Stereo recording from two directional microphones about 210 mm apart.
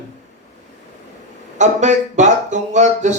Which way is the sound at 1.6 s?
35° right (ahead or behind).